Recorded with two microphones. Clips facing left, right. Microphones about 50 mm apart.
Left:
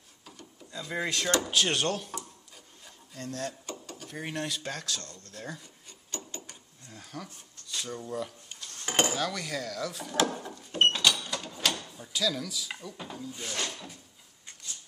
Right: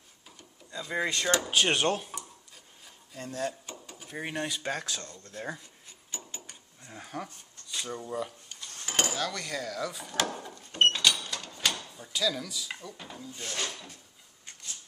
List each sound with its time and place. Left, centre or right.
0.4 s speech: centre
1.5 s speech: centre
3.2 s speech: centre
5.9 s filing: centre
6.9 s speech: right
7.6 s speech: centre
8.8 s dishes: left
9.1 s drawer open or close: centre
11.9 s speech: centre